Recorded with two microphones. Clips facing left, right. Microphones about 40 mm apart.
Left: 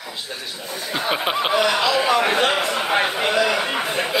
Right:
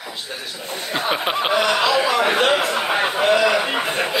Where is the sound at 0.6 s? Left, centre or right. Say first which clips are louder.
Right 1 dB; right.